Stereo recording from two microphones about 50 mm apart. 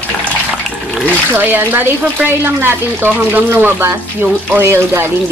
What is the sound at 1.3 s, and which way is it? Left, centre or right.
Speech, right.